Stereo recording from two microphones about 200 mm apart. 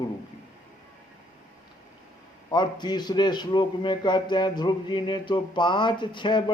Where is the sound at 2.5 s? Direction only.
20° left (ahead or behind).